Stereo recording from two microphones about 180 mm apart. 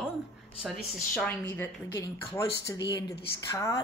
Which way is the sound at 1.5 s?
15° left (ahead or behind).